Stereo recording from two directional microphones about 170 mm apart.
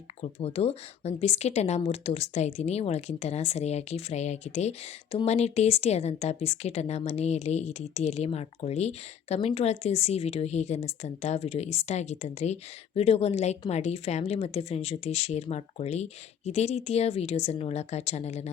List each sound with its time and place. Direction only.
0.2 s speech: 35° left (ahead or behind)